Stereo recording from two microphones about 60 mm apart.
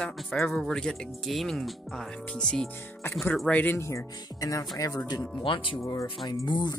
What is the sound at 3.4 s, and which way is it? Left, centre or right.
Speech, left.